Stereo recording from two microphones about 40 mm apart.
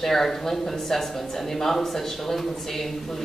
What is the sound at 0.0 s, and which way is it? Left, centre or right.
Speech, centre.